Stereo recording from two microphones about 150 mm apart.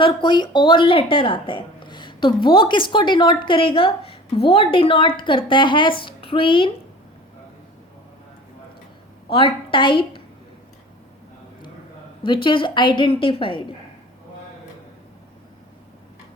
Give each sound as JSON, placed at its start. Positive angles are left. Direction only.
{"t": 0.0, "sound": "a woman's voice", "side_deg": 30}
{"t": 9.3, "sound": "a woman's voice", "side_deg": 35}
{"t": 12.2, "sound": "a woman's voice", "side_deg": 35}